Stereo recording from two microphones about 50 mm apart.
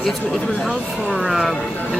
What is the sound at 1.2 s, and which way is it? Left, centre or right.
Speech, centre.